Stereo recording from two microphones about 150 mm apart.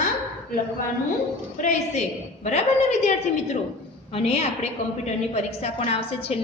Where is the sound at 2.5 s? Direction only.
50° left (ahead or behind).